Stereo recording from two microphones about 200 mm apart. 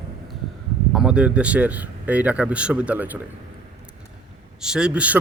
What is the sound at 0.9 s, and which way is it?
A man's voice, 5° right (ahead or behind).